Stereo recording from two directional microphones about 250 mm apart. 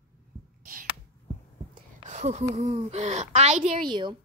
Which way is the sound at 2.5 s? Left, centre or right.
Right.